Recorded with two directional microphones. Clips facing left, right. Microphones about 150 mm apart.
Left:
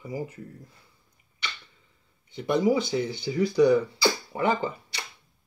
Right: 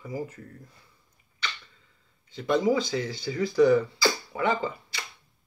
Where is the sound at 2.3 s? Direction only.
15° left (ahead or behind).